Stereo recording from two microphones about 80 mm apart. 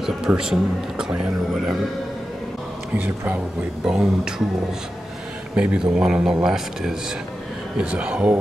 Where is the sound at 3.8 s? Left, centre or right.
Centre.